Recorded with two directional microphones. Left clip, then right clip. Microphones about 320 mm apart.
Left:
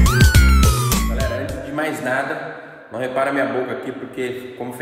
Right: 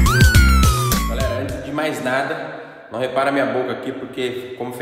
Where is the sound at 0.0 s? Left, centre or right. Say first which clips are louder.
Right 2 dB; centre.